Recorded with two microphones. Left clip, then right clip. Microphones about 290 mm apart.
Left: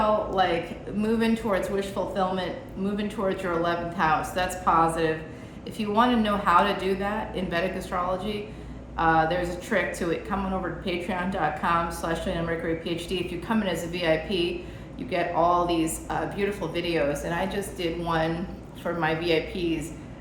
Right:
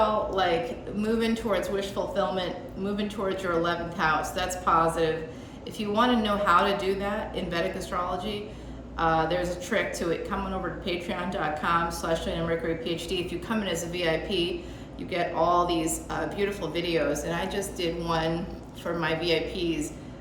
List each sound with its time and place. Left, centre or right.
1.0 s speech: centre